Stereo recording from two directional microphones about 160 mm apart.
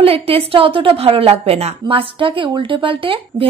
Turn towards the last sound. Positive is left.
turn(degrees=-35)  # may be behind; listen again after turning